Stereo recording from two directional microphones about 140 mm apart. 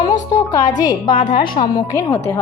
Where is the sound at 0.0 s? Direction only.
25° left (ahead or behind).